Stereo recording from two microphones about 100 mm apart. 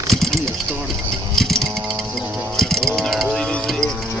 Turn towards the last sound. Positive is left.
turn(degrees=5)  # may be behind; listen again after turning